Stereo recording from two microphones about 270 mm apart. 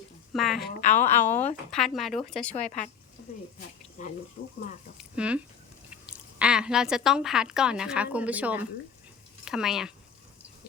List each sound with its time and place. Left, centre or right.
0.3 s speech: centre
0.7 s speech: left
1.0 s speech: centre
2.6 s speech: left
4.0 s speech: left
5.1 s speech: centre